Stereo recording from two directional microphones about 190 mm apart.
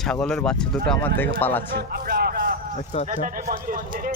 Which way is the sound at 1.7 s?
55° right (ahead or behind).